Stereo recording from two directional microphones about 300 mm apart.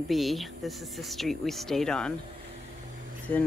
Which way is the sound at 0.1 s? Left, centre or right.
Centre.